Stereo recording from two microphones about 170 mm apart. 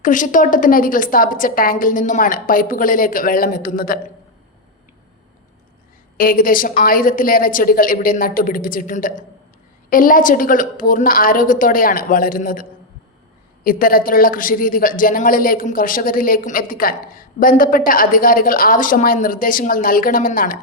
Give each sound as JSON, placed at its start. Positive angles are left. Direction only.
{"t": 0.0, "sound": "a woman's voice", "side_deg": 50}
{"t": 6.1, "sound": "a woman's voice", "side_deg": 55}
{"t": 13.7, "sound": "a woman's voice", "side_deg": 60}